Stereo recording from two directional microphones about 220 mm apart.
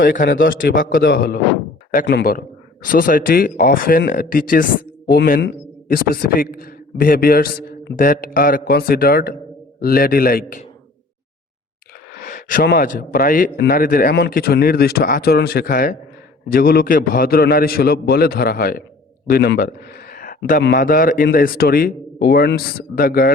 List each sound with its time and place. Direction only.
0.0 s a man's voice: 40° left (ahead or behind)
12.2 s a man's voice: 40° left (ahead or behind)